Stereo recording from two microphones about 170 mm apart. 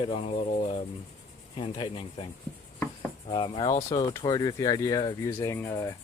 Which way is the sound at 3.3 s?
25° left (ahead or behind).